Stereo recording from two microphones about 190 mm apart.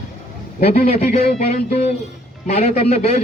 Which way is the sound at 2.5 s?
35° left (ahead or behind).